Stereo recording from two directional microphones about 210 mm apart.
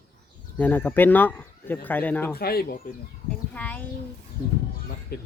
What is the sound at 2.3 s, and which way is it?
Speech, 45° left (ahead or behind).